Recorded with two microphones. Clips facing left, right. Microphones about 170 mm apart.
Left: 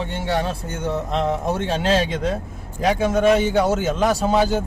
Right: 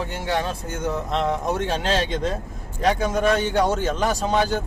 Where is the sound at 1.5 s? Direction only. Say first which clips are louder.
Left 1 dB; 30° left (ahead or behind).